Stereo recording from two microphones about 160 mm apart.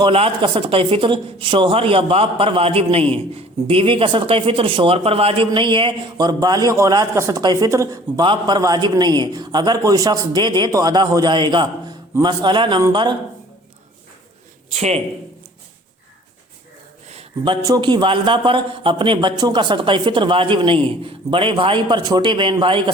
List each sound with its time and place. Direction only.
0.0 s a man's voice: 35° right (ahead or behind)
14.8 s speech: 40° right (ahead or behind)
17.1 s a sound: 35° right (ahead or behind)
17.6 s a man's voice: 25° right (ahead or behind)